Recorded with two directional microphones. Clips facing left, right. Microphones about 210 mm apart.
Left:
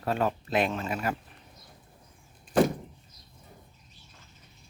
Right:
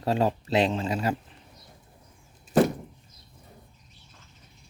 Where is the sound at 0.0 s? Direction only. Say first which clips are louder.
Right 3 dB; 30° right (ahead or behind).